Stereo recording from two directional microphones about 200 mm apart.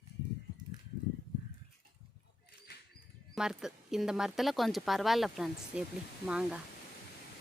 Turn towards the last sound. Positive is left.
turn(degrees=-5)  # may be behind; listen again after turning